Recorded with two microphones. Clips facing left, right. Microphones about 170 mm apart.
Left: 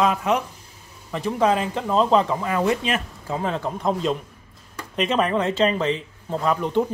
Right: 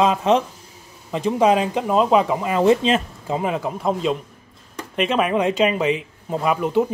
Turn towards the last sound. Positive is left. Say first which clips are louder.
# right 2 dB
turn(degrees=-5)  # may be behind; listen again after turning